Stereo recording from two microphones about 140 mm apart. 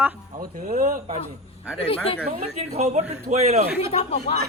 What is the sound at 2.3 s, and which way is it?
A woman's voice, 50° right (ahead or behind).